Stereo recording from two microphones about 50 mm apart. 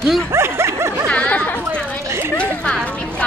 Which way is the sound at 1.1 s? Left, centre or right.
Left.